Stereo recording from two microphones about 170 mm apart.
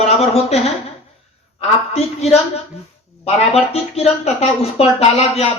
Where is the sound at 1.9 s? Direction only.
40° left (ahead or behind).